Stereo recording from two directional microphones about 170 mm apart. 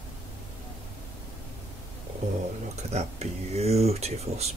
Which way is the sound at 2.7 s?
40° right (ahead or behind).